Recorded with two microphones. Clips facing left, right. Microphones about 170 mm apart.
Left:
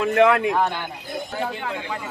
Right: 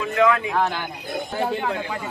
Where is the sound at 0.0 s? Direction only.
60° left (ahead or behind).